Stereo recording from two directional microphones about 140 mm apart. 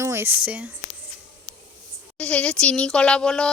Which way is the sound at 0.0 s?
15° right (ahead or behind).